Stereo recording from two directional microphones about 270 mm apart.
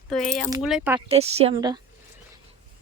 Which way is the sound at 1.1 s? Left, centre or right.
Right.